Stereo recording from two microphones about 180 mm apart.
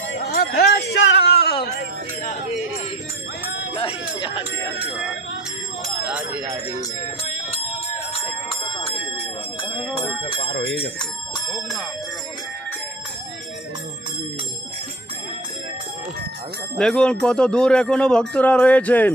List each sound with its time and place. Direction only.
0.1 s music: 65° left (ahead or behind)
6.1 s speech: 10° right (ahead or behind)
6.7 s speech: 40° left (ahead or behind)
8.1 s a sound: 30° left (ahead or behind)
9.9 s bell: 30° left (ahead or behind)
16.7 s speech: 5° left (ahead or behind)